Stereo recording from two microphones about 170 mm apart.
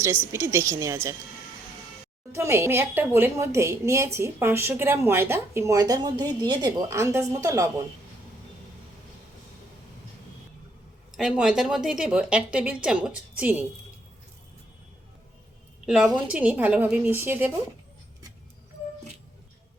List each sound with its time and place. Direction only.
0.0 s a woman's voice: 15° right (ahead or behind)
2.3 s a woman's voice: 15° right (ahead or behind)
11.2 s a woman's voice: 5° right (ahead or behind)
15.9 s a woman's voice: 5° right (ahead or behind)